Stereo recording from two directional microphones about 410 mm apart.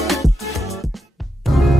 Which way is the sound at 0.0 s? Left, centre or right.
Centre.